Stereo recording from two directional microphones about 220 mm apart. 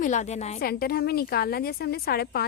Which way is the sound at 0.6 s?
45° left (ahead or behind).